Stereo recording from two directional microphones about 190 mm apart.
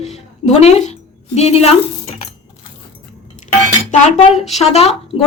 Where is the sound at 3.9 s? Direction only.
35° left (ahead or behind).